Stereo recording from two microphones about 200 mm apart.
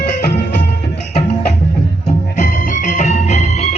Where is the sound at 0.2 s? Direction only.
55° left (ahead or behind).